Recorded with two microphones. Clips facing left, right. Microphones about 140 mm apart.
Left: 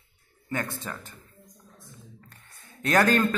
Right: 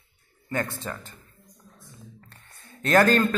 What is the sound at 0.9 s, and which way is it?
Speech, 5° left (ahead or behind).